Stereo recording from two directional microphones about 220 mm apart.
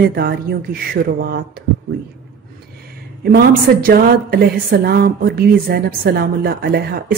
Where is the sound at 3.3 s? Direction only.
40° right (ahead or behind).